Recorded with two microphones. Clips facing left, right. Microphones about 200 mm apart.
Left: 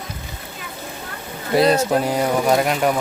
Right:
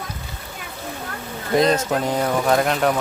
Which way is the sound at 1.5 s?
10° left (ahead or behind).